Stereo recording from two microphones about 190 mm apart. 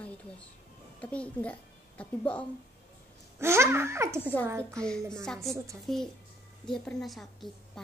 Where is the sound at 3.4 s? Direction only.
15° right (ahead or behind).